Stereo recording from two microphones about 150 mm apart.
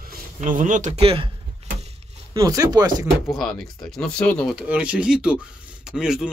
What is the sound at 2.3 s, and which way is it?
Speech, 25° right (ahead or behind).